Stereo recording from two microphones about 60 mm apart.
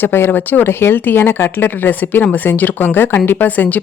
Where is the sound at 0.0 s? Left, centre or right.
Left.